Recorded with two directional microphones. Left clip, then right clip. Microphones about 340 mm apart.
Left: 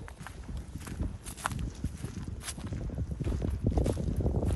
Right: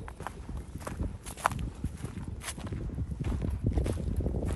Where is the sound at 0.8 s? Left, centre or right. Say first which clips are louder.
Right 3 dB; centre.